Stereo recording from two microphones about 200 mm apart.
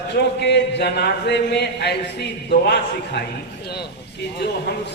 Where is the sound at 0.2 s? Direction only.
55° left (ahead or behind).